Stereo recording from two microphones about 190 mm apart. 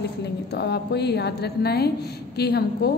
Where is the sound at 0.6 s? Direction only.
60° left (ahead or behind).